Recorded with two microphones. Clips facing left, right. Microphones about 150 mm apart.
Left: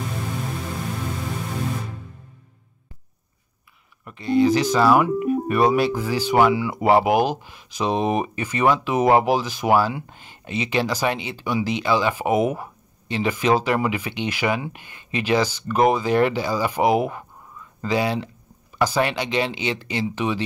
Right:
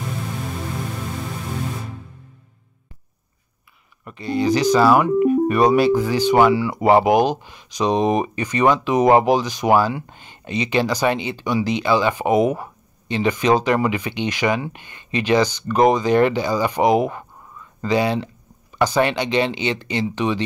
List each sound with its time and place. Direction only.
4.0 s speech: centre (ahead or behind)